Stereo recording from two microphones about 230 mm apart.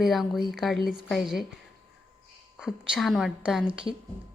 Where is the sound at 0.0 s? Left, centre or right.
Centre.